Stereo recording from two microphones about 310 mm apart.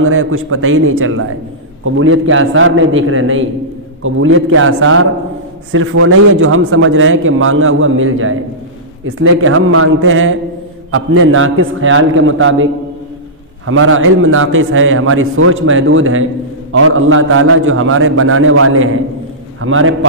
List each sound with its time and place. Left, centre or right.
0.0 s a man's voice: right
13.7 s a man's voice: right